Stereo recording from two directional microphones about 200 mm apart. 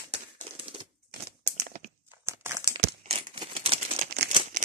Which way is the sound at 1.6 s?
40° right (ahead or behind).